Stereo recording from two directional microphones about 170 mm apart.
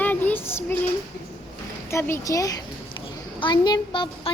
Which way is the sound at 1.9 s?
15° left (ahead or behind).